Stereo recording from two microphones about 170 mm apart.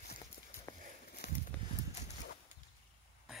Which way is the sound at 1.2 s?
70° left (ahead or behind).